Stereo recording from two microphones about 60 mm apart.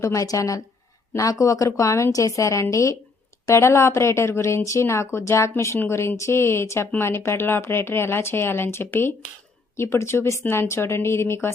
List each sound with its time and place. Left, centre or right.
0.0 s a woman's voice: left